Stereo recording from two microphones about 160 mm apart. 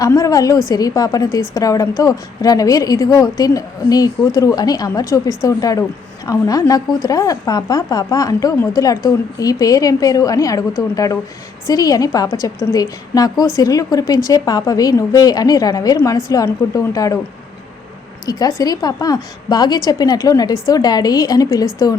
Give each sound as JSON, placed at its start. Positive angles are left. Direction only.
{"t": 0.0, "sound": "a woman's voice", "side_deg": 20}
{"t": 18.3, "sound": "a woman's voice", "side_deg": 20}